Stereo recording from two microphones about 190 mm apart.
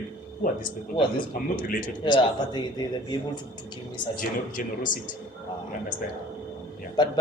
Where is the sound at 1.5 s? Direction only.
45° left (ahead or behind).